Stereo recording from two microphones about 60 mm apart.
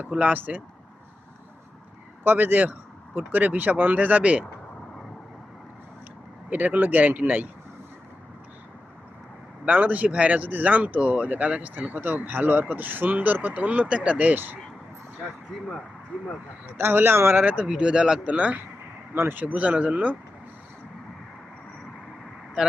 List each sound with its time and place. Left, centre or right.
0.1 s speech: right
2.2 s speech: right
6.5 s speech: right
9.6 s speech: right
16.7 s speech: right
17.4 s speech: right
17.7 s speech: centre
22.6 s speech: centre